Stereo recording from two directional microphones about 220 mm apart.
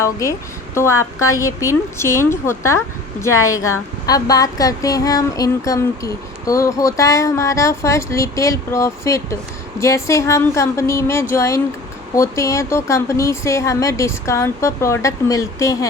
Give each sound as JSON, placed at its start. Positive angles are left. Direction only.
{"t": 0.0, "sound": "a woman's voice", "side_deg": 15}